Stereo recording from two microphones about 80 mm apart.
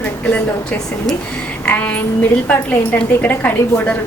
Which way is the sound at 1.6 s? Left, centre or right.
Centre.